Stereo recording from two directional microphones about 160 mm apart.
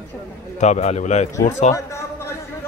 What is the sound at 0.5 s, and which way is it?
A man's voice, 50° left (ahead or behind).